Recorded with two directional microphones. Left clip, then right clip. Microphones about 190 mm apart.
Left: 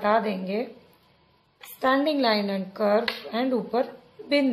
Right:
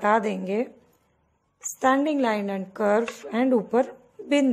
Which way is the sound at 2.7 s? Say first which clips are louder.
Even; 50° right (ahead or behind).